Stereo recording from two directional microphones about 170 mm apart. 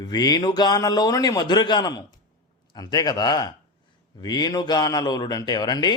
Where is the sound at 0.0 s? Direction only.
25° left (ahead or behind).